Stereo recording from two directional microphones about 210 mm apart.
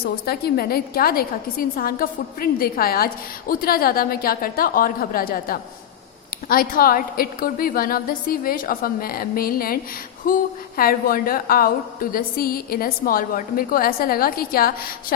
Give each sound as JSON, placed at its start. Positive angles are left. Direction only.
{"t": 0.3, "sound": "a woman's voice", "side_deg": 45}
{"t": 10.3, "sound": "a sound", "side_deg": 40}
{"t": 10.8, "sound": "a woman's voice", "side_deg": 45}